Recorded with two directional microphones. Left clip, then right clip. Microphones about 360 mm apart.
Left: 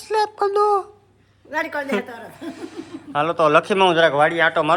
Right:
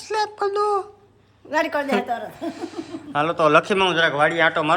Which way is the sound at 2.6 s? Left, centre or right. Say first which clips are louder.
Right 2 dB; centre.